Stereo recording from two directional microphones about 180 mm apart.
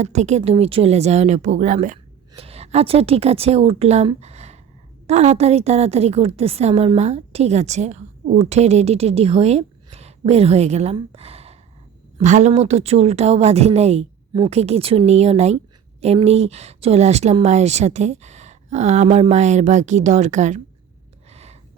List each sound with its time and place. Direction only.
0.0 s a woman's voice: 40° right (ahead or behind)
2.3 s a woman's voice: 35° right (ahead or behind)
21.2 s a sound: 35° right (ahead or behind)